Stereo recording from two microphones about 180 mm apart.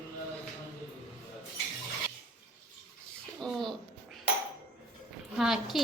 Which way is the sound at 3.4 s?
Centre (ahead or behind).